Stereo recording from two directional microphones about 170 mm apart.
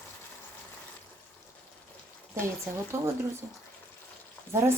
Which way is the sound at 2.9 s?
15° right (ahead or behind).